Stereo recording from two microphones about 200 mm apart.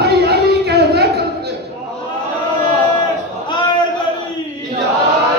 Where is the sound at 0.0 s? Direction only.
50° right (ahead or behind).